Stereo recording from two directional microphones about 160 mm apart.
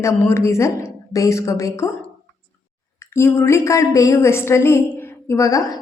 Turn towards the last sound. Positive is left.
turn(degrees=20)  # may be behind; listen again after turning